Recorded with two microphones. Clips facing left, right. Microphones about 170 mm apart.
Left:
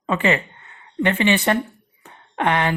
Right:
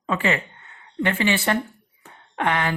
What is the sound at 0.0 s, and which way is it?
A woman's voice, 20° left (ahead or behind).